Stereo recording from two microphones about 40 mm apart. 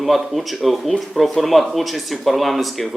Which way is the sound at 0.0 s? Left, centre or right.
Centre.